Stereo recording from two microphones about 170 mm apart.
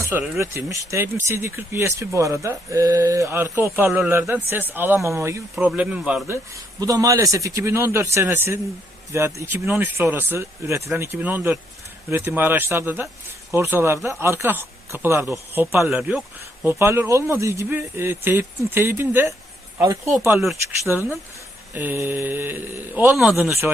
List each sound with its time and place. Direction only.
0.0 s speech: 15° right (ahead or behind)
20.8 s speech: 10° right (ahead or behind)